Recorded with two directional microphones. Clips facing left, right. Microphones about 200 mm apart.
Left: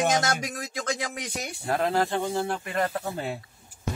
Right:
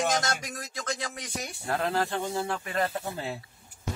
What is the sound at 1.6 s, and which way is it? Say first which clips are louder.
Speech: left 3 dB; 20° left (ahead or behind).